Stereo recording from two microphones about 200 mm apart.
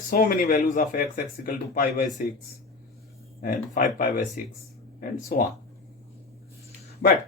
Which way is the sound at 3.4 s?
45° left (ahead or behind).